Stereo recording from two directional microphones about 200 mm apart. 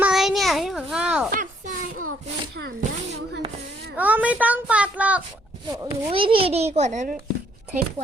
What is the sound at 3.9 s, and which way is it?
Speech, 10° right (ahead or behind).